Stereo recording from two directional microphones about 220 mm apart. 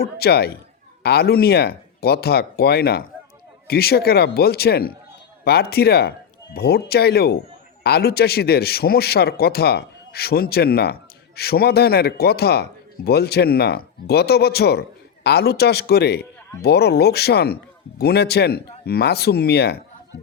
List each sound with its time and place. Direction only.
0.0 s speech: 45° left (ahead or behind)